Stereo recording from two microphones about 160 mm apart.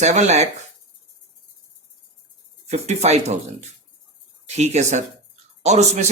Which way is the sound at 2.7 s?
45° right (ahead or behind).